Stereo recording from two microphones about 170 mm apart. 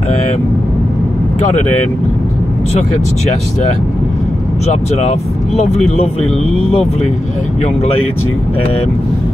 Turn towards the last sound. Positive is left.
turn(degrees=40)  # may be behind; listen again after turning